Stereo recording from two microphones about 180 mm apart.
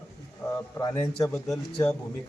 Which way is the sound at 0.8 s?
20° left (ahead or behind).